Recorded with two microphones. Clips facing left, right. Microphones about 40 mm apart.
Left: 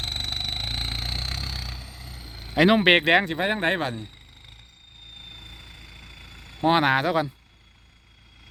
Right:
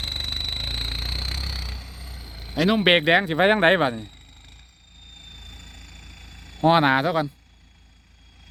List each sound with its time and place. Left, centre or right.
0.0 s a sound: centre
2.6 s speech: centre
2.8 s speech: centre
3.3 s speech: right
5.1 s vehicle: centre